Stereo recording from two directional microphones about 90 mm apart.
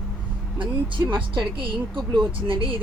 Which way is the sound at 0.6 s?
65° right (ahead or behind).